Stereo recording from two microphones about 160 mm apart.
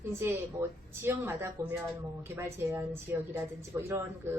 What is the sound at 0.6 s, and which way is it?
Speech, 20° right (ahead or behind).